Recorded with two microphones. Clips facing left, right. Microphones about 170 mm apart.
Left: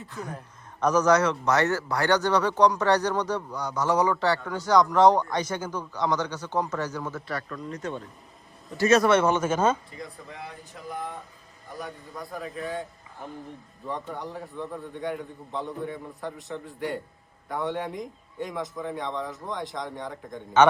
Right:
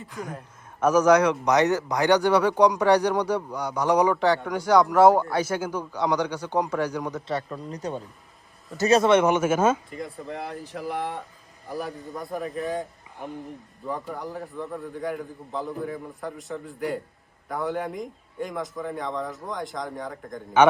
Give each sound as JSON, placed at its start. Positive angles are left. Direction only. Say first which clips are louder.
{"t": 0.0, "sound": "a man's voice", "louder": "right 1 dB", "side_deg": -10}
{"t": 7.3, "sound": "speech", "louder": "right 3 dB", "side_deg": -25}
{"t": 8.9, "sound": "a man's voice", "louder": "right 2 dB", "side_deg": -20}
{"t": 10.3, "sound": "speech", "louder": "right 8 dB", "side_deg": -70}
{"t": 13.2, "sound": "a man's voice", "louder": "right 4 dB", "side_deg": -15}
{"t": 13.8, "sound": "a man's voice", "louder": "right 2 dB", "side_deg": 0}